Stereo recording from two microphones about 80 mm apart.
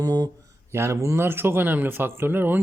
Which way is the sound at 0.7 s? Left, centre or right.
Right.